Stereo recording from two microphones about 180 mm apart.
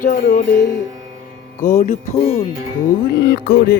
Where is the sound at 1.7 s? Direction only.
40° left (ahead or behind).